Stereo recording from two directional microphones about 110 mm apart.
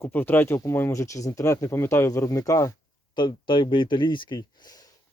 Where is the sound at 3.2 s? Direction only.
45° left (ahead or behind).